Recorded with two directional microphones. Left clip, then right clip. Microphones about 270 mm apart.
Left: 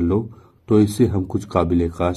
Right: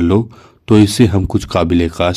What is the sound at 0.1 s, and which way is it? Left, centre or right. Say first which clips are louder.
Speech: right 7 dB; right.